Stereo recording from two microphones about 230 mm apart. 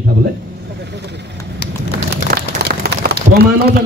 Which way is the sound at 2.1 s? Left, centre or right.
Right.